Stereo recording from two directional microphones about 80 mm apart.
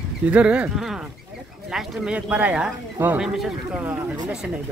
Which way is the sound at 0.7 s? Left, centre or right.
Centre.